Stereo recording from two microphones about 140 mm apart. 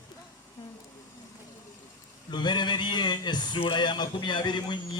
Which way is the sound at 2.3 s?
30° left (ahead or behind).